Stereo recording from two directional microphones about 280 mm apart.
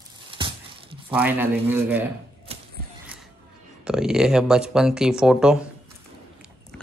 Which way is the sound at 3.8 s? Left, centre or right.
Centre.